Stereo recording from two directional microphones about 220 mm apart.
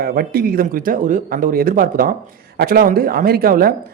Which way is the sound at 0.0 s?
45° right (ahead or behind).